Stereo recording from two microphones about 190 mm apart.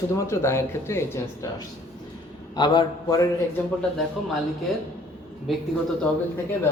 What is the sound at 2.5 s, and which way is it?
Speech, 25° left (ahead or behind).